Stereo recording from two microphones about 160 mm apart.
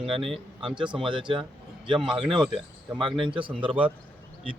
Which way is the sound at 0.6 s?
30° right (ahead or behind).